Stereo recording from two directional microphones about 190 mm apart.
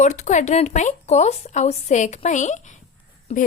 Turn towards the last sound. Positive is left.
turn(degrees=45)  # may be behind; listen again after turning